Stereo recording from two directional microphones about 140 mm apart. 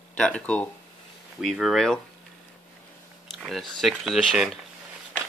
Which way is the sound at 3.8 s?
Centre (ahead or behind).